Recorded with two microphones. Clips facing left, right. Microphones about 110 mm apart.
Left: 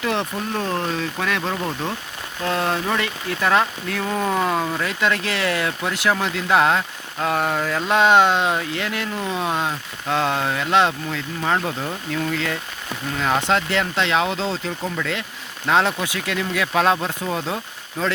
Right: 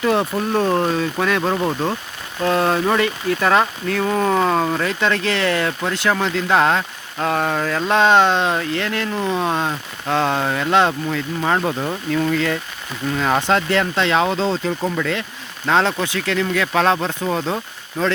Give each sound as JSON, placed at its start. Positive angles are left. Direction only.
{"t": 0.0, "sound": "speech", "side_deg": -5}
{"t": 1.4, "sound": "speech", "side_deg": -20}
{"t": 2.4, "sound": "speech", "side_deg": -5}
{"t": 15.6, "sound": "speech", "side_deg": 10}